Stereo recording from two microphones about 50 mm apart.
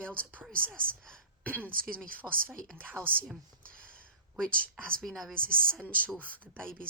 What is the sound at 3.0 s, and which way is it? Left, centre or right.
Speech, right.